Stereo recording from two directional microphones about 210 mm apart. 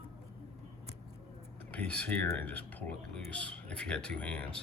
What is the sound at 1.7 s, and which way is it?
Speech, 5° left (ahead or behind).